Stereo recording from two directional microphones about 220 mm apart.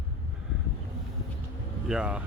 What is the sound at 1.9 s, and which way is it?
Speech, 5° right (ahead or behind).